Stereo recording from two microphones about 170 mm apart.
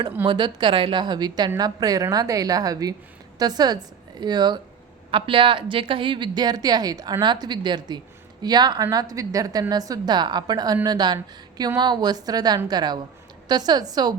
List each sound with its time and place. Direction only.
0.3 s a woman's voice: 25° right (ahead or behind)